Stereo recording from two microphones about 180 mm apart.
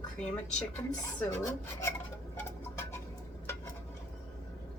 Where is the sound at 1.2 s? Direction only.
15° left (ahead or behind).